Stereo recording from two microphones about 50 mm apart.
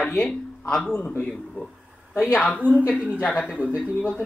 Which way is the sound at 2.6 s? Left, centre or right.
Right.